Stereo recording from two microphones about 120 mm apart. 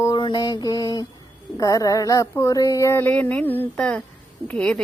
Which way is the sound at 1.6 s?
30° left (ahead or behind).